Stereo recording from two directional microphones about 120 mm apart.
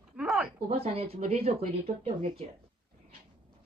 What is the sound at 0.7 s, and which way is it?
Speech, 55° right (ahead or behind).